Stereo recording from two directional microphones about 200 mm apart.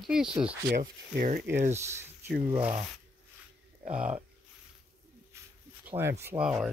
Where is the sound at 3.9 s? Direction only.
5° right (ahead or behind).